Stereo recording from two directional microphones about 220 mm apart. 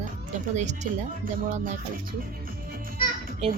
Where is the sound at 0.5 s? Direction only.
30° right (ahead or behind).